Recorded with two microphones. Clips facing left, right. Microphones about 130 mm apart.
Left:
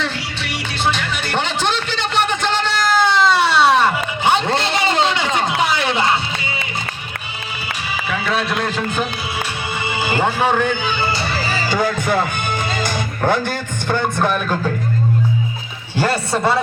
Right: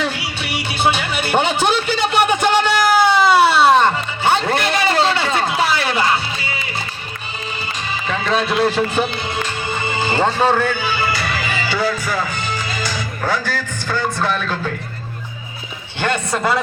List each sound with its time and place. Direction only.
0.0 s music: 10° right (ahead or behind)
4.2 s a sound: 20° left (ahead or behind)
8.1 s a man's voice: 5° left (ahead or behind)
9.4 s music: 10° left (ahead or behind)
10.9 s music: 25° left (ahead or behind); by 13.0 s 55° left (ahead or behind)
13.3 s speech: 50° left (ahead or behind)
13.8 s music: 20° left (ahead or behind)
16.0 s a man's voice: 35° left (ahead or behind)